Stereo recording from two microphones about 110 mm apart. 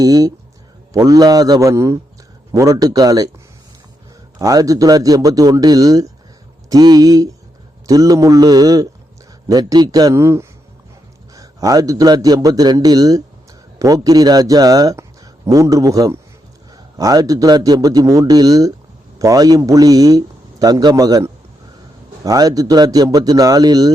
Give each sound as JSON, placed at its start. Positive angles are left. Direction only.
{"t": 0.0, "sound": "a man's voice", "side_deg": -35}
{"t": 4.4, "sound": "a man's voice", "side_deg": -30}